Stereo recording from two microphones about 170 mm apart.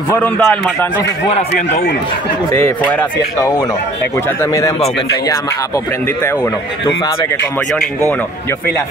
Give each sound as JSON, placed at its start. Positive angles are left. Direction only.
{"t": 0.1, "sound": "a man's voice", "side_deg": 10}
{"t": 1.5, "sound": "a man's voice", "side_deg": 80}
{"t": 2.5, "sound": "a man's voice", "side_deg": 10}